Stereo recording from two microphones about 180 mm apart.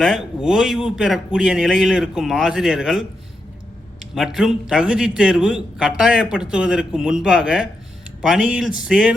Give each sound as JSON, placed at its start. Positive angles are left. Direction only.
{"t": 0.0, "sound": "a man's voice", "side_deg": -5}
{"t": 4.1, "sound": "a man's voice", "side_deg": -5}